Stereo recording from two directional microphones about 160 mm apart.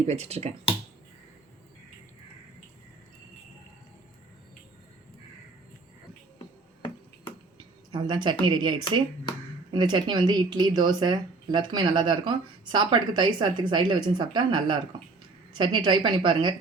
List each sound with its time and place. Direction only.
0.0 s speech: 40° right (ahead or behind)
7.9 s speech: 30° right (ahead or behind)